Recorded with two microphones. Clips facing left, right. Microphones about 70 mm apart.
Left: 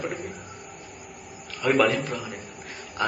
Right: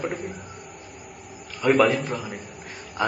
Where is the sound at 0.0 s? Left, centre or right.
Centre.